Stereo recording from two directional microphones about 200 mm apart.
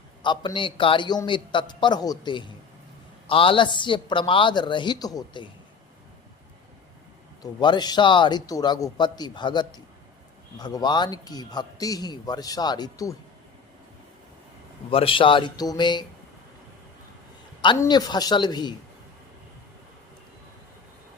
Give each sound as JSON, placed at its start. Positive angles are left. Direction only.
{"t": 0.2, "sound": "speech", "side_deg": 25}
{"t": 7.6, "sound": "speech", "side_deg": 20}
{"t": 14.8, "sound": "speech", "side_deg": 25}
{"t": 17.6, "sound": "speech", "side_deg": 20}